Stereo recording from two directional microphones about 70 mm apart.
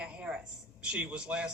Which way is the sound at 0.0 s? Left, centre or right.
Centre.